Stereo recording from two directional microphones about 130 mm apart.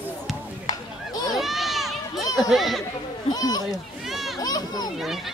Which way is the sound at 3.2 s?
30° left (ahead or behind).